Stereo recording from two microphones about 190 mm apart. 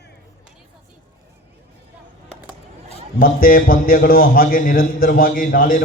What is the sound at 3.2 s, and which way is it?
A man's voice, 50° left (ahead or behind).